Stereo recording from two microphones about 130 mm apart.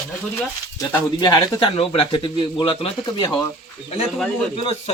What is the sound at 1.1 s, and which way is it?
Speech, 35° left (ahead or behind).